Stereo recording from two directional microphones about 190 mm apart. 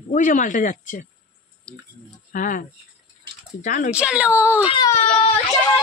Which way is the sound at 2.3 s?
45° left (ahead or behind).